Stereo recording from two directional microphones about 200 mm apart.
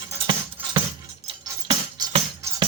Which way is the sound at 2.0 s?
20° right (ahead or behind).